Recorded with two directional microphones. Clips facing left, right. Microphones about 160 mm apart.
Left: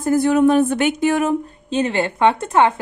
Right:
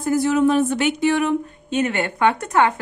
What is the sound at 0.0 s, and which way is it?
Speech, 55° left (ahead or behind).